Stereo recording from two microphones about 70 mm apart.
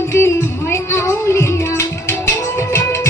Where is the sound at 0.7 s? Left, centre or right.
Left.